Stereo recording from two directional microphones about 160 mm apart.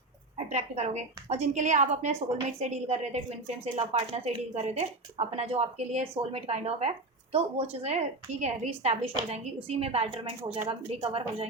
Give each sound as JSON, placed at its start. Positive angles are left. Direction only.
{"t": 0.3, "sound": "a woman's voice", "side_deg": -45}